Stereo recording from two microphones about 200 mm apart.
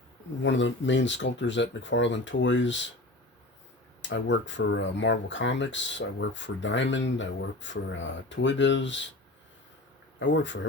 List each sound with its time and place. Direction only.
0.4 s speech: 65° left (ahead or behind)
4.1 s speech: 65° left (ahead or behind)
10.2 s speech: 65° left (ahead or behind)